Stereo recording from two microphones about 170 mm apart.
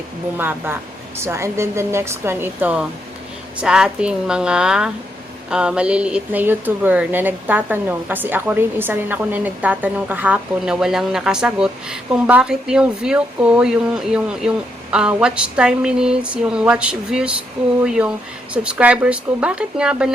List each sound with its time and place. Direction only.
0.3 s a woman's voice: 10° right (ahead or behind)